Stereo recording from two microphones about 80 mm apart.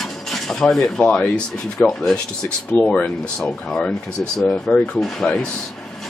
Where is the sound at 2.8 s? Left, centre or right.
Centre.